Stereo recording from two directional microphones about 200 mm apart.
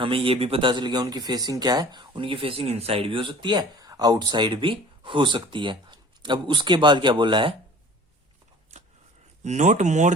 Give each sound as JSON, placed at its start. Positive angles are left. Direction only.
{"t": 0.0, "sound": "speech", "side_deg": -25}
{"t": 9.4, "sound": "speech", "side_deg": -35}